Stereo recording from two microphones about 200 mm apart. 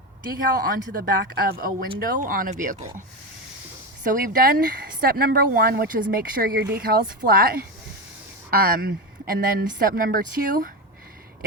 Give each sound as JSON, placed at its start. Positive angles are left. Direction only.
{"t": 0.6, "sound": "speech", "side_deg": -45}
{"t": 4.0, "sound": "speech", "side_deg": -40}